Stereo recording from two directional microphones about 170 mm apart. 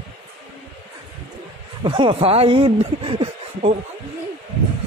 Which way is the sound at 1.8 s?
30° right (ahead or behind).